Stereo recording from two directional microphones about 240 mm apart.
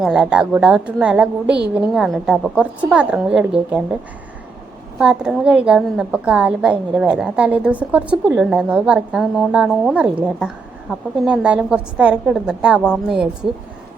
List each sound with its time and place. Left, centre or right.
0.0 s a woman's voice: centre
4.9 s a woman's voice: centre